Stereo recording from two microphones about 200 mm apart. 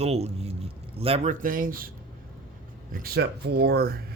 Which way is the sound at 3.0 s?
50° right (ahead or behind).